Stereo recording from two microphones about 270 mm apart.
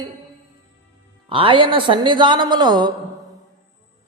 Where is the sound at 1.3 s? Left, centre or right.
Centre.